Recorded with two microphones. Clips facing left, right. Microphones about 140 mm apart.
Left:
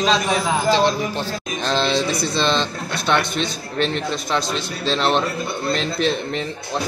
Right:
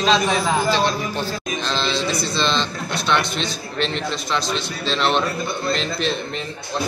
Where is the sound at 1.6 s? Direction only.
50° left (ahead or behind).